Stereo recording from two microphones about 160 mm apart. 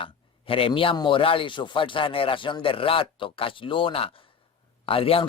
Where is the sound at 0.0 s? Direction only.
35° left (ahead or behind).